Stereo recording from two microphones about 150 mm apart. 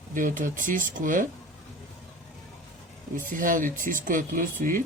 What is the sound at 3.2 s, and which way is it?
Speech, 65° right (ahead or behind).